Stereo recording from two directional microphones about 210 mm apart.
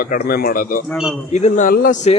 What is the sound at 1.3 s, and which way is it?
Speech, 35° left (ahead or behind).